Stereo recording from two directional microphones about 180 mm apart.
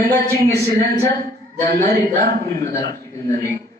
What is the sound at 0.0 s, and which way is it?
Speech, 20° left (ahead or behind).